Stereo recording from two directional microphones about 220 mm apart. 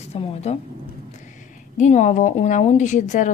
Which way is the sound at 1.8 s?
30° left (ahead or behind).